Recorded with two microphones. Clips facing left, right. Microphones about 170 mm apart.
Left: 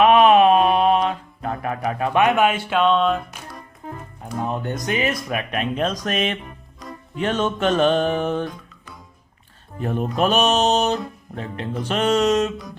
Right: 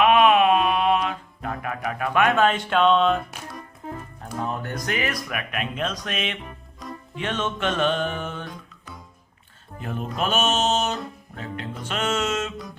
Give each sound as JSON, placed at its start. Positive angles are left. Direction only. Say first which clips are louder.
{"t": 0.0, "sound": "music", "louder": "left 4 dB", "side_deg": 35}
{"t": 4.4, "sound": "speech", "louder": "left 4 dB", "side_deg": 20}
{"t": 6.1, "sound": "music", "louder": "left 6 dB", "side_deg": 40}
{"t": 6.8, "sound": "music", "louder": "even", "side_deg": 0}
{"t": 7.2, "sound": "music", "louder": "left 6 dB", "side_deg": 40}
{"t": 9.8, "sound": "music", "louder": "left 6 dB", "side_deg": 40}